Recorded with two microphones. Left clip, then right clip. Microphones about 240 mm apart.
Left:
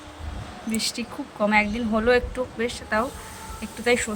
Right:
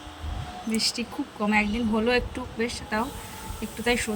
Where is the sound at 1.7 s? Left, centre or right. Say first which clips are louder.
Left 4 dB; left.